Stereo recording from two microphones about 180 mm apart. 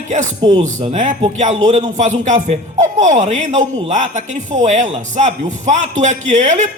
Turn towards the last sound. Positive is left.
turn(degrees=-40)  # may be behind; listen again after turning